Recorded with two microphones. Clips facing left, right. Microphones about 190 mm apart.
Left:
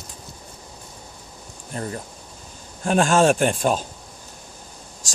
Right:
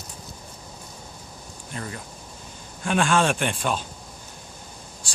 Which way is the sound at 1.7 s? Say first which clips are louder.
Left 5 dB; 40° left (ahead or behind).